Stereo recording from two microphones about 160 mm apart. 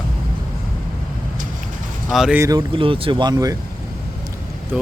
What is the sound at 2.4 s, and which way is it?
Speech, 25° right (ahead or behind).